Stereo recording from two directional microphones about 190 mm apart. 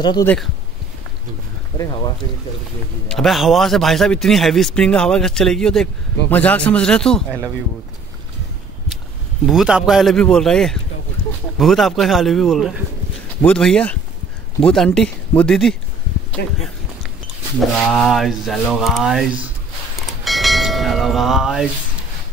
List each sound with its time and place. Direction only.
0.0 s speech: 20° left (ahead or behind)
3.1 s a man's voice: centre (ahead or behind)
9.5 s a man's voice: 5° right (ahead or behind)
16.4 s speech: 60° left (ahead or behind)
17.6 s a man's voice: centre (ahead or behind)
20.2 s church bell: centre (ahead or behind)